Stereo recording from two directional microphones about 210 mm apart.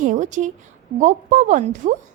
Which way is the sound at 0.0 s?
35° right (ahead or behind).